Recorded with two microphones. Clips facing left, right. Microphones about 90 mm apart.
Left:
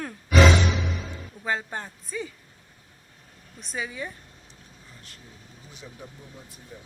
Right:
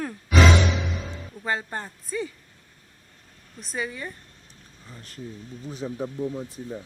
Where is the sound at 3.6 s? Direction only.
Centre (ahead or behind).